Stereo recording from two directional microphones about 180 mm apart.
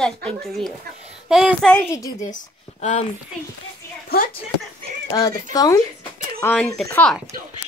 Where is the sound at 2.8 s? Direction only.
40° left (ahead or behind).